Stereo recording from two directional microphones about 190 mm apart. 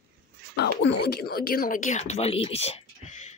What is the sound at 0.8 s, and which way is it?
Speech, 60° left (ahead or behind).